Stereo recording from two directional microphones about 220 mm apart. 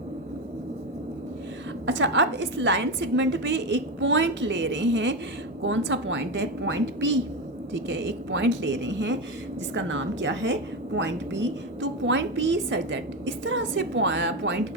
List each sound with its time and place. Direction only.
1.9 s a woman's voice: 55° right (ahead or behind)